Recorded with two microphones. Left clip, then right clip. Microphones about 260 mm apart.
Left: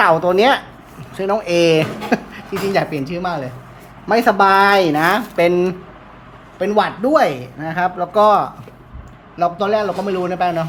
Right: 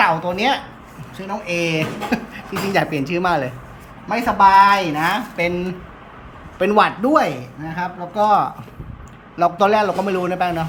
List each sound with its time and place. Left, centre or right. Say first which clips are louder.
0.0 s speech: left 5 dB; centre
4.1 s speech: even; left
6.6 s speech: right 1 dB; centre